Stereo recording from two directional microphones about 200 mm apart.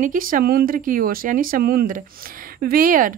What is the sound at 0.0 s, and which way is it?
Speech, 45° right (ahead or behind).